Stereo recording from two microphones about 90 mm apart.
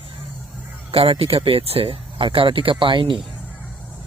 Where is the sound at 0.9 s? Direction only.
90° right.